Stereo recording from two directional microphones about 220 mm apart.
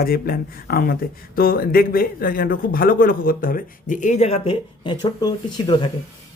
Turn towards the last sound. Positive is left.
turn(degrees=20)  # may be behind; listen again after turning